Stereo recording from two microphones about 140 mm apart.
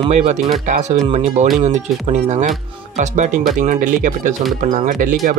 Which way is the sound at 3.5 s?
65° right (ahead or behind).